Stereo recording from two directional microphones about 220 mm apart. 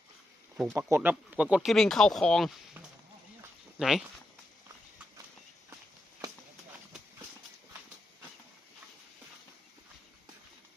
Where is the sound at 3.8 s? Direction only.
Centre (ahead or behind).